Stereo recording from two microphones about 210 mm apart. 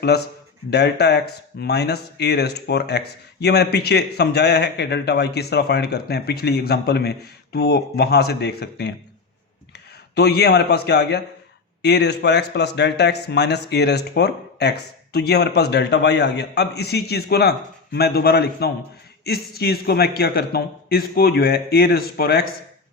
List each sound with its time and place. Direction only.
0.7 s speech: 50° left (ahead or behind)
10.2 s speech: 50° left (ahead or behind)